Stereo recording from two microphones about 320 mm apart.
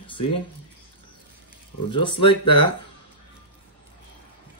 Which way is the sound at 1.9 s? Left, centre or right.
Centre.